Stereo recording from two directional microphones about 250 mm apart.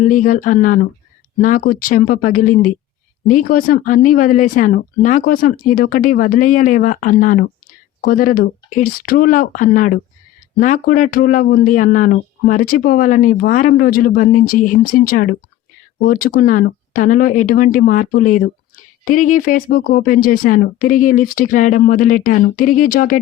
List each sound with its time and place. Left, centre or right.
0.0 s speech: left